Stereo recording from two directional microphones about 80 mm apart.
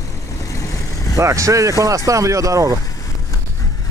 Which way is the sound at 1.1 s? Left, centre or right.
Right.